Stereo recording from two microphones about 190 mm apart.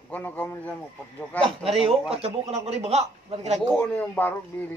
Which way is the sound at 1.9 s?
30° right (ahead or behind).